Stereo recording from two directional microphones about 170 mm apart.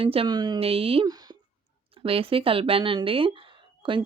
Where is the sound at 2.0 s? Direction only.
35° right (ahead or behind).